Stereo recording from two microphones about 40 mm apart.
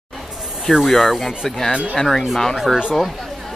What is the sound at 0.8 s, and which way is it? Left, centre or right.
Speech, centre.